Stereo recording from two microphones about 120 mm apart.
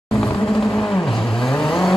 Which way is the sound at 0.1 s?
5° left (ahead or behind).